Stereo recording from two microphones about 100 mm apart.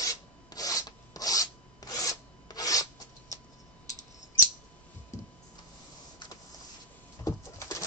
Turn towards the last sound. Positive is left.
turn(degrees=30)  # may be behind; listen again after turning